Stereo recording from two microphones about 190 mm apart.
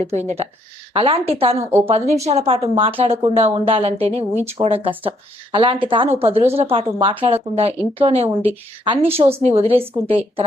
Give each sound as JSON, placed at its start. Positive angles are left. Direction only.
{"t": 0.1, "sound": "a woman's voice", "side_deg": -35}